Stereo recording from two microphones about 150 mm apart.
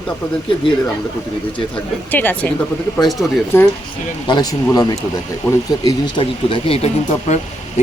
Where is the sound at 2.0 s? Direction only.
10° left (ahead or behind).